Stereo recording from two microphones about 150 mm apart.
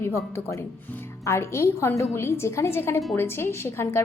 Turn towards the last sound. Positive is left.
turn(degrees=15)  # may be behind; listen again after turning